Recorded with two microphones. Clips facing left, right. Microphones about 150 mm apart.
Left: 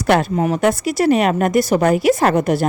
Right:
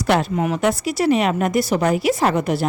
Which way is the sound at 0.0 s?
55° left (ahead or behind).